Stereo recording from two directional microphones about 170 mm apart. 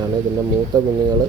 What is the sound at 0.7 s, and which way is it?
Speech, 25° right (ahead or behind).